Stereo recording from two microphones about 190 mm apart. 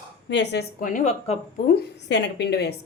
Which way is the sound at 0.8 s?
45° left (ahead or behind).